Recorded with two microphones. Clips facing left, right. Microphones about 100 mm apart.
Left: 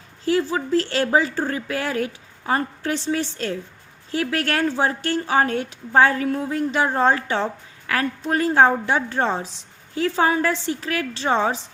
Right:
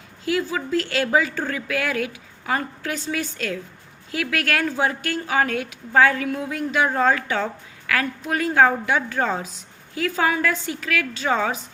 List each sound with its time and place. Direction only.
0.5 s a woman's voice: 35° left (ahead or behind)